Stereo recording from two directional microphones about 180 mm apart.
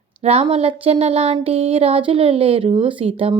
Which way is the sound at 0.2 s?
35° right (ahead or behind).